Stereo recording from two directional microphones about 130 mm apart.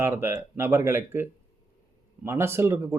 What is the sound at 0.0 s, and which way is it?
Speech, 15° right (ahead or behind).